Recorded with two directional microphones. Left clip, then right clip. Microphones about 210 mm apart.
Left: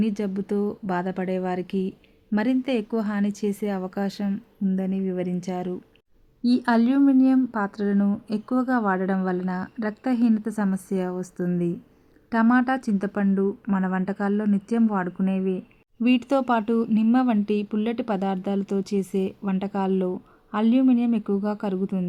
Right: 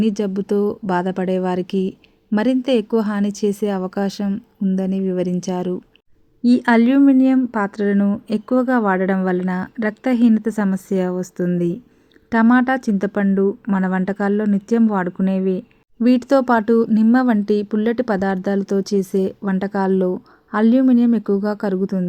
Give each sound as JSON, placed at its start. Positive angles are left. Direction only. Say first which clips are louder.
{"t": 0.0, "sound": "a woman's voice", "louder": "right 7 dB", "side_deg": -25}